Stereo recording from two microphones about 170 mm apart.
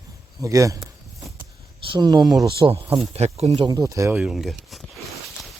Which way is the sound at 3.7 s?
20° right (ahead or behind).